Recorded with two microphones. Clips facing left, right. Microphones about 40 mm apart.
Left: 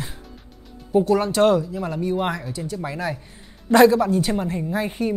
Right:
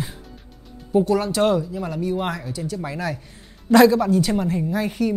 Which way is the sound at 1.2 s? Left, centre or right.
Left.